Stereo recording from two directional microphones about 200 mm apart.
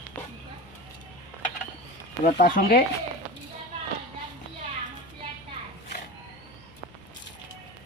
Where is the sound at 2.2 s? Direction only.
45° left (ahead or behind).